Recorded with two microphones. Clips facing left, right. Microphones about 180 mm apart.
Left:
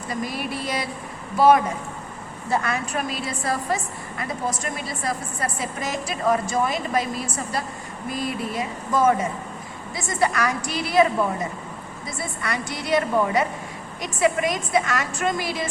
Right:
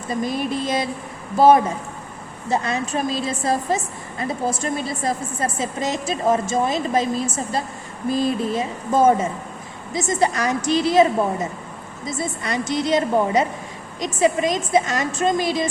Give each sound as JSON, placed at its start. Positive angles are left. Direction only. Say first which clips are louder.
{"t": 0.1, "sound": "a woman's voice", "louder": "right 5 dB", "side_deg": -25}